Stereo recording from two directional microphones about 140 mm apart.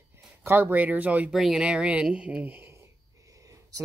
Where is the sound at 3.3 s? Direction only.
25° right (ahead or behind).